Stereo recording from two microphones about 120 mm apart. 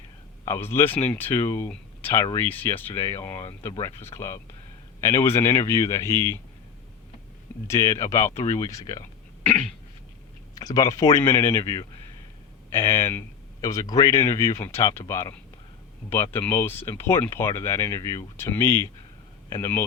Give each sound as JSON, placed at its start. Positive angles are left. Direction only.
{"t": 0.4, "sound": "speech", "side_deg": 20}
{"t": 7.7, "sound": "speech", "side_deg": 25}
{"t": 9.4, "sound": "cough", "side_deg": 10}
{"t": 10.6, "sound": "speech", "side_deg": 30}